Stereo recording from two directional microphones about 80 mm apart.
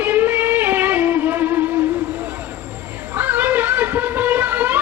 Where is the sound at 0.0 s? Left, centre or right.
Right.